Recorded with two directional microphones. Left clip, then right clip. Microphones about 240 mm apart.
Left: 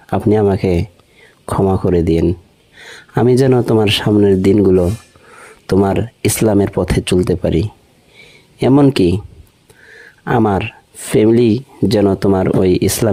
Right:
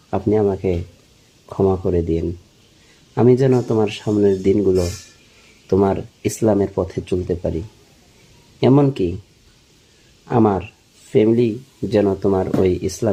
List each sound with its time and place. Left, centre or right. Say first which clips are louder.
0.1 s speech: left 4 dB; left
8.6 s speech: left 4 dB; left
10.2 s speech: left 3 dB; left